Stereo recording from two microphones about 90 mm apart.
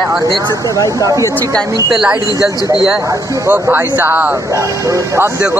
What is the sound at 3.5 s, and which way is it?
Speech, 20° right (ahead or behind).